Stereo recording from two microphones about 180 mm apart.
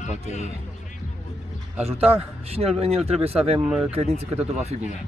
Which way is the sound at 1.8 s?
35° right (ahead or behind).